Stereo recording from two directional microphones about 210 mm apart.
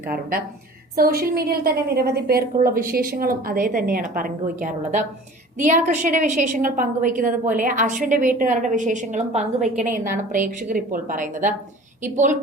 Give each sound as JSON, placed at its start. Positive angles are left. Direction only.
{"t": 0.1, "sound": "a woman's voice", "side_deg": -45}